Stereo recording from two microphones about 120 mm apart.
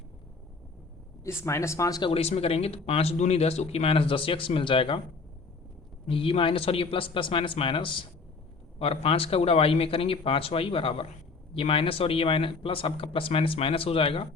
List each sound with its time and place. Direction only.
1.2 s speech: 25° left (ahead or behind)
2.0 s a man's voice: 50° left (ahead or behind)
6.1 s speech: 50° left (ahead or behind)